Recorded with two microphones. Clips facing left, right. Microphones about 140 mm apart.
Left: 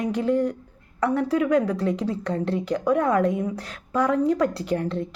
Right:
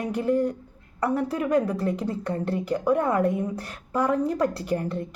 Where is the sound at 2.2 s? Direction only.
75° left (ahead or behind).